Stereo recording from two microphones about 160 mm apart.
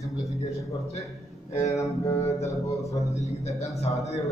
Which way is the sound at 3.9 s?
35° left (ahead or behind).